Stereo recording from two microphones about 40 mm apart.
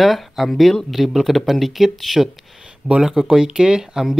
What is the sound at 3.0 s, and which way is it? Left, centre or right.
Speech, centre.